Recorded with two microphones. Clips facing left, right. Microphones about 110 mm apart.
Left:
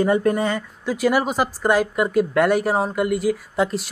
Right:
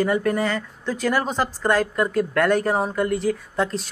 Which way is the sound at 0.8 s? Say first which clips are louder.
Left 4 dB; 10° left (ahead or behind).